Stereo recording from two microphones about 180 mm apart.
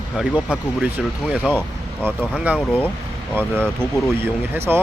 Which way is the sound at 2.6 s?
10° left (ahead or behind).